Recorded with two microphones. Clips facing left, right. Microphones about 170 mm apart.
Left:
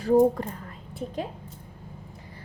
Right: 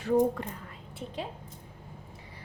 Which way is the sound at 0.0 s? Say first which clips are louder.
Left 6 dB; 40° left (ahead or behind).